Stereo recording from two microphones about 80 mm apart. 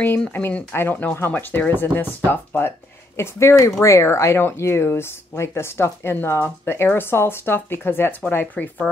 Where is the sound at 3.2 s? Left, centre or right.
Left.